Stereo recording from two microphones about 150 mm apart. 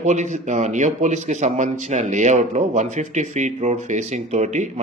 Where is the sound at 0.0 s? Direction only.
50° right (ahead or behind).